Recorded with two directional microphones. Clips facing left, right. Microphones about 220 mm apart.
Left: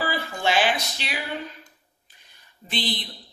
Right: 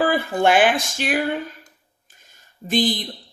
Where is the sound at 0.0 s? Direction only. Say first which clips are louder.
Right 8 dB; 55° right (ahead or behind).